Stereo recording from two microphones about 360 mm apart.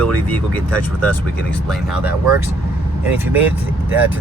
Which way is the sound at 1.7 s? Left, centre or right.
Centre.